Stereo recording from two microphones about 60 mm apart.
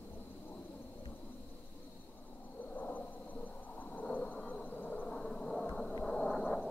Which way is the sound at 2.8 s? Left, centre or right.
Left.